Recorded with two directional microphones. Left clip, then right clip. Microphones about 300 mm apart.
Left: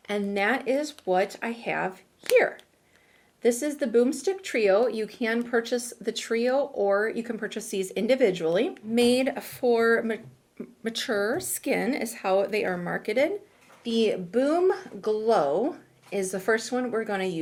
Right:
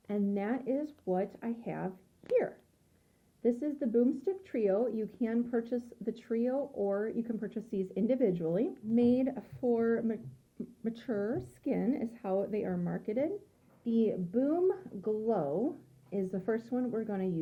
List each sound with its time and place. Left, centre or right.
0.1 s speech: centre
6.7 s speech: centre
6.9 s speech: centre